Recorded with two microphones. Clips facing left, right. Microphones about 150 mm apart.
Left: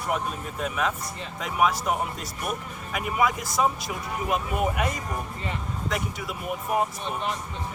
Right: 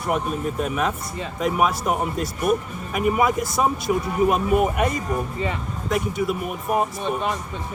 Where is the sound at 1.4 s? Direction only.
50° right (ahead or behind).